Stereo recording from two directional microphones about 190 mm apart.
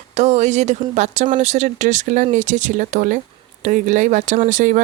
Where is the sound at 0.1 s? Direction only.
35° right (ahead or behind).